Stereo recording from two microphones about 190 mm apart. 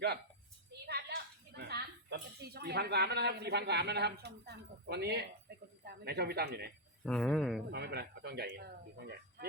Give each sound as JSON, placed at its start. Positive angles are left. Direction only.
{"t": 0.9, "sound": "speech", "side_deg": -60}
{"t": 7.0, "sound": "speech", "side_deg": 5}
{"t": 7.7, "sound": "speech", "side_deg": -60}